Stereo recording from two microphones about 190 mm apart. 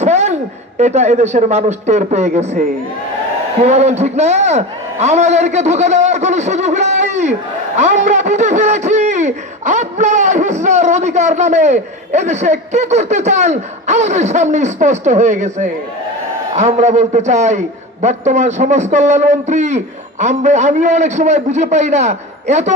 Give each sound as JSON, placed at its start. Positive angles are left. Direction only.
{"t": 0.0, "sound": "speech", "side_deg": -35}
{"t": 3.6, "sound": "a man's voice", "side_deg": -35}